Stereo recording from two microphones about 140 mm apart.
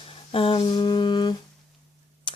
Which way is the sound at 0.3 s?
40° left (ahead or behind).